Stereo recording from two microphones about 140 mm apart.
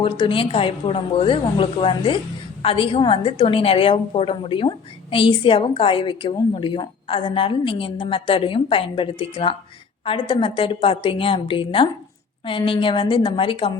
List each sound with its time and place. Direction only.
0.0 s a woman's voice: 40° left (ahead or behind)